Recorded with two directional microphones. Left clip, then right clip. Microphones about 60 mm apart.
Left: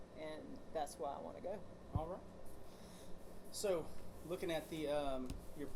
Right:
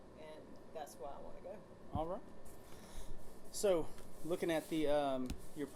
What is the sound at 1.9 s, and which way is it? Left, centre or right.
Speech, right.